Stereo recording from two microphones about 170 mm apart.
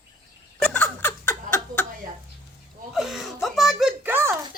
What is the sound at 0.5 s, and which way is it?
Giggle, 5° left (ahead or behind).